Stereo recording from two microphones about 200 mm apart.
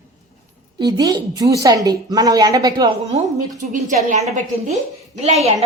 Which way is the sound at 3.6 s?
35° right (ahead or behind).